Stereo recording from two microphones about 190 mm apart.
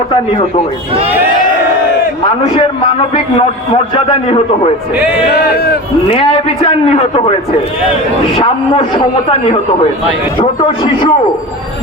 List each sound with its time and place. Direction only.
3.9 s a man's voice: 25° left (ahead or behind)
8.4 s a man's voice: 25° left (ahead or behind)
10.4 s a man's voice: 25° left (ahead or behind)